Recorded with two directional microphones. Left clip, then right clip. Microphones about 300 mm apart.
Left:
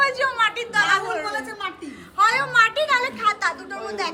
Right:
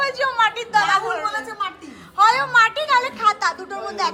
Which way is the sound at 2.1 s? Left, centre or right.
Centre.